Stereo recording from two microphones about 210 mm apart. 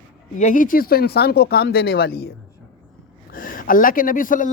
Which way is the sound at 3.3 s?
40° left (ahead or behind).